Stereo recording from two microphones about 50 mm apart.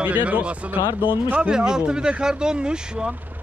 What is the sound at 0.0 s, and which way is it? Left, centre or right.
Speech, right.